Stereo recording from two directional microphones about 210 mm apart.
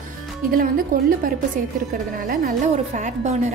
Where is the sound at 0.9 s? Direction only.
40° right (ahead or behind).